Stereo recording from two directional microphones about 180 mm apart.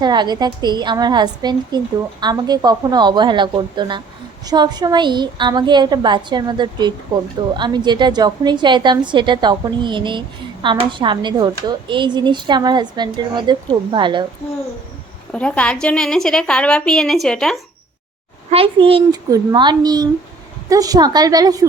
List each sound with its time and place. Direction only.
0.0 s a woman's voice: 25° right (ahead or behind)
15.3 s a woman's voice: 5° left (ahead or behind)
18.5 s a woman's voice: 30° right (ahead or behind)